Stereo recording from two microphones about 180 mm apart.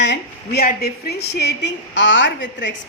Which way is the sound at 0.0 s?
70° left (ahead or behind).